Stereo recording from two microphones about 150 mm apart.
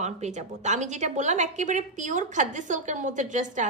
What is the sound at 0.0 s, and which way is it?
A woman's voice, 50° right (ahead or behind).